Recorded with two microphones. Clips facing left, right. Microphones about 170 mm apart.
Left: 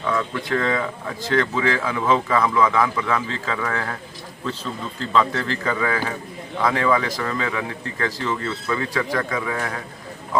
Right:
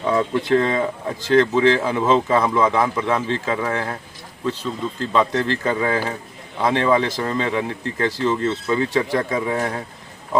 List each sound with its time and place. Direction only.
0.0 s speech: 25° right (ahead or behind)
5.1 s speech: 20° right (ahead or behind)